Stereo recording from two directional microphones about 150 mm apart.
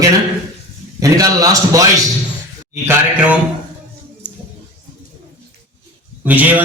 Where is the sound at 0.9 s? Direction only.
25° right (ahead or behind).